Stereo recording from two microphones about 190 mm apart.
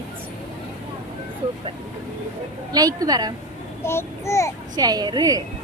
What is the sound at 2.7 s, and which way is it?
Speech, 20° right (ahead or behind).